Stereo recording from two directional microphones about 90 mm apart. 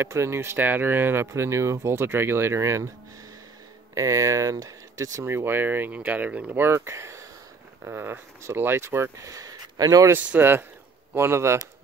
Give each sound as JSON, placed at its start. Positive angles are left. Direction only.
{"t": 0.0, "sound": "speech", "side_deg": -30}
{"t": 3.9, "sound": "speech", "side_deg": -40}
{"t": 5.2, "sound": "speech", "side_deg": -25}
{"t": 9.3, "sound": "a sound", "side_deg": -45}
{"t": 10.1, "sound": "speech", "side_deg": -20}